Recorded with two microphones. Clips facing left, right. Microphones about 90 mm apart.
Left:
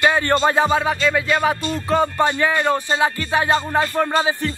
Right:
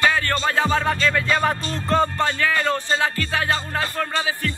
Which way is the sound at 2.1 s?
20° left (ahead or behind).